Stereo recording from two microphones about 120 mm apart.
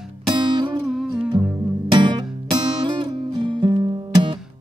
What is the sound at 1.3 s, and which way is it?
Music, 40° right (ahead or behind).